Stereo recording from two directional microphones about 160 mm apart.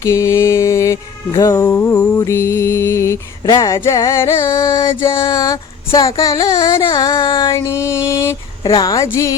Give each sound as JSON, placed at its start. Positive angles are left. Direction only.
{"t": 0.0, "sound": "mantra", "side_deg": 20}
{"t": 1.4, "sound": "music", "side_deg": 20}
{"t": 5.1, "sound": "a sound", "side_deg": 25}